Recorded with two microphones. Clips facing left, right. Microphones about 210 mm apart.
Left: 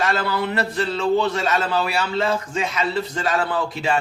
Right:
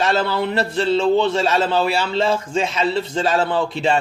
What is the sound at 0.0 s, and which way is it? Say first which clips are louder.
A man's voice: right 3 dB; 25° right (ahead or behind).